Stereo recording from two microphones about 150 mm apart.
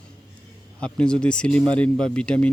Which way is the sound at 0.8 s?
5° left (ahead or behind).